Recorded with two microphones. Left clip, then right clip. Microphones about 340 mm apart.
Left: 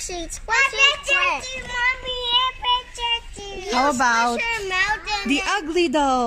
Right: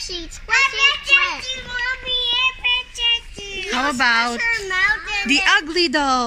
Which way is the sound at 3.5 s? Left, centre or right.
Centre.